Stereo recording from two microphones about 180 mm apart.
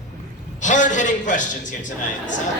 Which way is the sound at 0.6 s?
45° left (ahead or behind).